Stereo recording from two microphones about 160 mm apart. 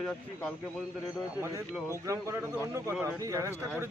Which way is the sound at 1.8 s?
20° right (ahead or behind).